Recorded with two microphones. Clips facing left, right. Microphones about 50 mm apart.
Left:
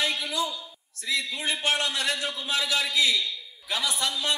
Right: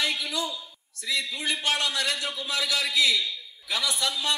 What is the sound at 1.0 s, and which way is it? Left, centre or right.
A man's voice, left.